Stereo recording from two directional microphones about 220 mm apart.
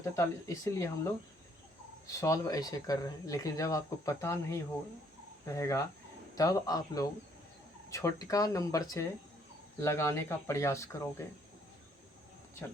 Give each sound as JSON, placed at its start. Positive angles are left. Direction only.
{"t": 0.0, "sound": "speech", "side_deg": 15}